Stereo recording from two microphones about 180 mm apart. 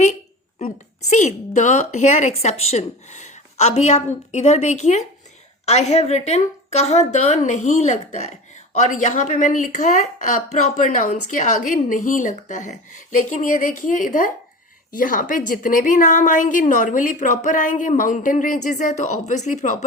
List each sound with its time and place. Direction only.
1.1 s a woman's voice: 40° left (ahead or behind)